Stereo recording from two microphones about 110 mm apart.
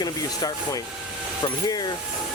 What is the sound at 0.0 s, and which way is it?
Speech, 35° left (ahead or behind).